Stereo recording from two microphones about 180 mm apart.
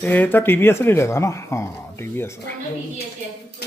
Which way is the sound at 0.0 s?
10° left (ahead or behind).